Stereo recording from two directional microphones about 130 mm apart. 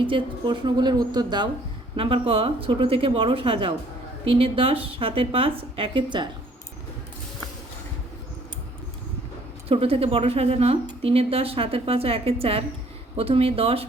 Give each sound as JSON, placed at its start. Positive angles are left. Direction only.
{"t": 0.1, "sound": "a woman's voice", "side_deg": -35}
{"t": 2.0, "sound": "a woman's voice", "side_deg": -45}
{"t": 9.6, "sound": "a woman's voice", "side_deg": -45}